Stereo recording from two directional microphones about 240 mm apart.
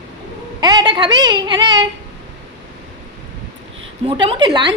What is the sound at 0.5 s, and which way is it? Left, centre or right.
A woman's voice, centre.